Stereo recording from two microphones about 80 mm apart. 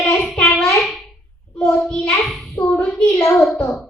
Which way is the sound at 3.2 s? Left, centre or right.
Left.